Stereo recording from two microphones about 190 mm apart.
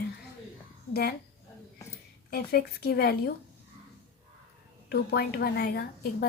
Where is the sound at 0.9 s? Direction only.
55° left (ahead or behind).